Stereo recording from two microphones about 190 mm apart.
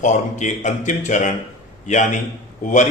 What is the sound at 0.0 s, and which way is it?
A man's voice, 40° left (ahead or behind).